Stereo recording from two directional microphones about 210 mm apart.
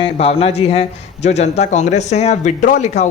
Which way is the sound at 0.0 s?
30° left (ahead or behind).